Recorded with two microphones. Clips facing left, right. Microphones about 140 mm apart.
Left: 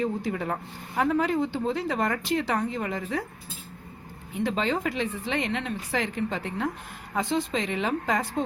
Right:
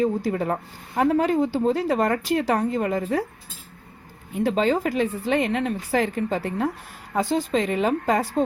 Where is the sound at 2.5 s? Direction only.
45° right (ahead or behind).